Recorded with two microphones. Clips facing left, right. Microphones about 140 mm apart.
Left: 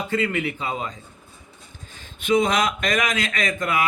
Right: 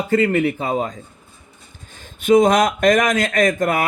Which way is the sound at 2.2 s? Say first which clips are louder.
Right 7 dB; 45° right (ahead or behind).